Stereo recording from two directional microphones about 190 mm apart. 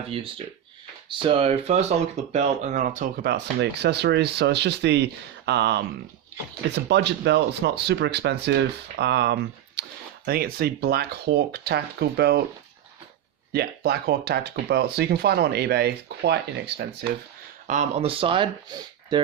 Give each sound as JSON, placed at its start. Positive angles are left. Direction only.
{"t": 0.1, "sound": "speech", "side_deg": -30}
{"t": 3.2, "sound": "speech", "side_deg": -60}
{"t": 13.5, "sound": "speech", "side_deg": -55}
{"t": 17.7, "sound": "speech", "side_deg": -35}